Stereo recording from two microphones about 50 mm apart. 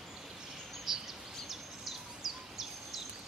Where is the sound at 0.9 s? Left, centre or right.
Centre.